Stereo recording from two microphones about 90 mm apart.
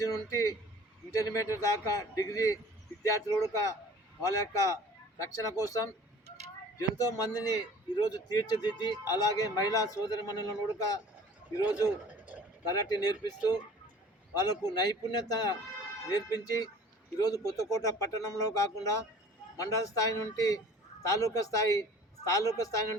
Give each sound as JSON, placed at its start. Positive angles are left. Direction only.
{"t": 0.0, "sound": "a man's voice", "side_deg": 35}